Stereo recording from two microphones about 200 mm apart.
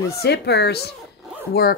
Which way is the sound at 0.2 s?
55° left (ahead or behind).